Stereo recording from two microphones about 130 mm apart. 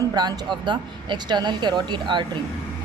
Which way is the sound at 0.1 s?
30° right (ahead or behind).